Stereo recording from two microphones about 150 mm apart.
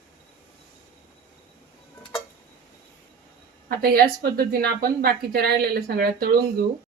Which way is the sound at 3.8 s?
90° right.